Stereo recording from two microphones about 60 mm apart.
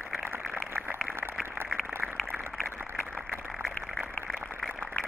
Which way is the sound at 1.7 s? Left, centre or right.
Centre.